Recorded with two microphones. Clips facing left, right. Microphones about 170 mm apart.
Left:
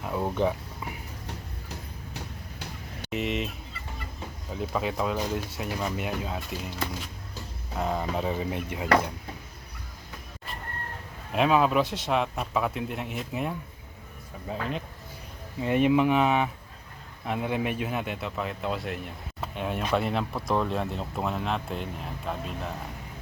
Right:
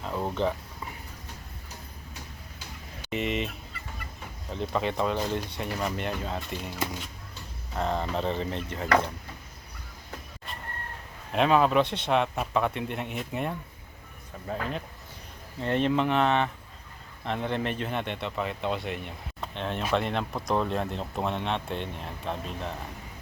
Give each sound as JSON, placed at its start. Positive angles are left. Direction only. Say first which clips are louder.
{"t": 0.0, "sound": "speech", "louder": "left 2 dB", "side_deg": 10}
{"t": 2.1, "sound": "a sound", "louder": "left 7 dB", "side_deg": 65}
{"t": 3.1, "sound": "speech", "louder": "even", "side_deg": 0}
{"t": 4.5, "sound": "speech", "louder": "right 1 dB", "side_deg": 5}
{"t": 7.8, "sound": "speech", "louder": "even", "side_deg": 5}
{"t": 11.3, "sound": "speech", "louder": "even", "side_deg": 5}